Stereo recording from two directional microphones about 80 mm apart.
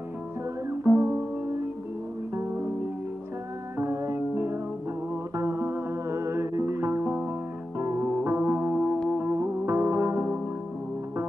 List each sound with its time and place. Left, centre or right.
0.9 s music: right
2.3 s music: right
3.7 s music: right
8.1 s music: centre
9.2 s music: right